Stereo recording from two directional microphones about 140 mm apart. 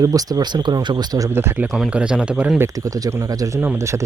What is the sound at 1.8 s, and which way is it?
Speech, 5° right (ahead or behind).